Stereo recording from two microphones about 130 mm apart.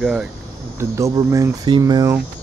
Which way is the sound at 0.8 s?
20° right (ahead or behind).